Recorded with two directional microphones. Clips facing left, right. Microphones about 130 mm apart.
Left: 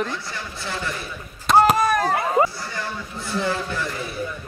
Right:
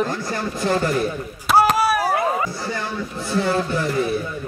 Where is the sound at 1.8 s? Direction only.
10° right (ahead or behind).